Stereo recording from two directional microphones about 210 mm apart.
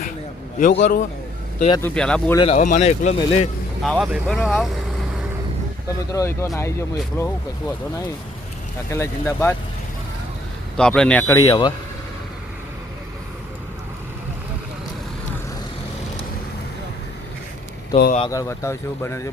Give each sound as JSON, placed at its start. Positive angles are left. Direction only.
{"t": 0.7, "sound": "a man's voice", "side_deg": 50}
{"t": 1.8, "sound": "speech", "side_deg": 5}
{"t": 2.5, "sound": "speech", "side_deg": 40}
{"t": 3.8, "sound": "speech", "side_deg": 0}
{"t": 6.1, "sound": "speech", "side_deg": 15}
{"t": 8.9, "sound": "speech", "side_deg": 10}
{"t": 10.8, "sound": "speech", "side_deg": 5}
{"t": 17.9, "sound": "speech", "side_deg": 40}
{"t": 18.3, "sound": "speech", "side_deg": 15}